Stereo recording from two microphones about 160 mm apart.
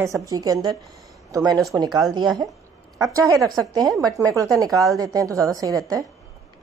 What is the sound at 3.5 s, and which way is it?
A woman's voice, 25° right (ahead or behind).